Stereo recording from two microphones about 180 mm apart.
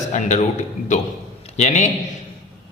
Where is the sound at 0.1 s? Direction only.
40° left (ahead or behind).